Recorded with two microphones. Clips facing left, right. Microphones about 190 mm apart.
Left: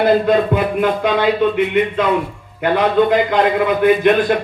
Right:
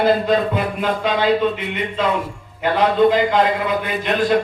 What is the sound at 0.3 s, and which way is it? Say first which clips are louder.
A man's voice: left 4 dB; 55° left (ahead or behind).